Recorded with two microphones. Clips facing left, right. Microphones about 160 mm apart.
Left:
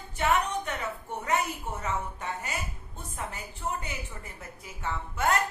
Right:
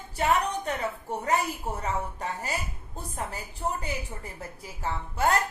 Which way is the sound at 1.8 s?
35° right (ahead or behind).